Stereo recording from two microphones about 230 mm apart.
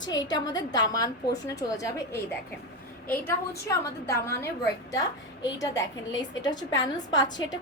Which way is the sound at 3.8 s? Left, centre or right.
Centre.